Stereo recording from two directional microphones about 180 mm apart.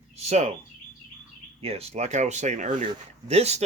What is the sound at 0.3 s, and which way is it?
Speech, 40° right (ahead or behind).